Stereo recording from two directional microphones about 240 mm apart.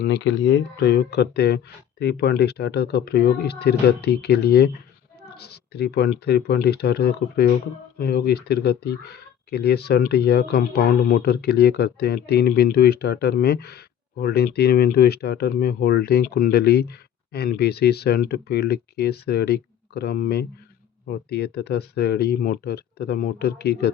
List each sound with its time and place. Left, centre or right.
0.0 s speech: left